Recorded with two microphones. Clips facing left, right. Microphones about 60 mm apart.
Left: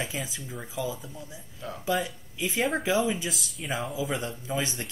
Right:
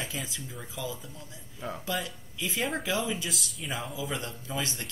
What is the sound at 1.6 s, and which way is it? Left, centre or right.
Speech, centre.